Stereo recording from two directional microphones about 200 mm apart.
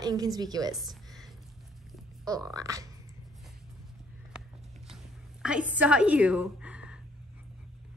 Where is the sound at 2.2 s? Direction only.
5° left (ahead or behind).